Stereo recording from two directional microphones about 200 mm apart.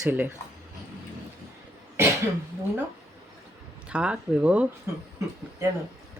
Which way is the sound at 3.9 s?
5° right (ahead or behind).